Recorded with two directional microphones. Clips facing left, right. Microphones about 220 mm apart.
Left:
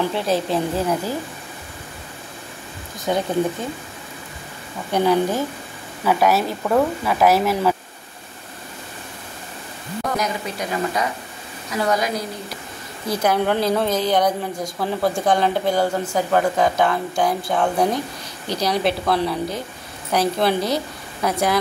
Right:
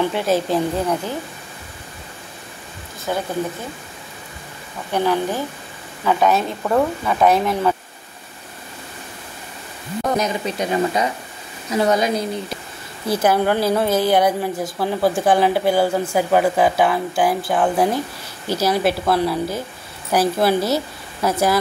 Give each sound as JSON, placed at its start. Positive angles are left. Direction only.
{"t": 0.1, "sound": "speech", "side_deg": 0}
{"t": 3.1, "sound": "speech", "side_deg": 20}
{"t": 4.9, "sound": "speech", "side_deg": 15}
{"t": 10.1, "sound": "speech", "side_deg": -25}
{"t": 13.1, "sound": "a woman's voice", "side_deg": -5}